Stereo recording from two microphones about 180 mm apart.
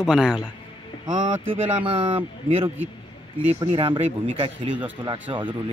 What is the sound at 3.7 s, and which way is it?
Speech, 30° right (ahead or behind).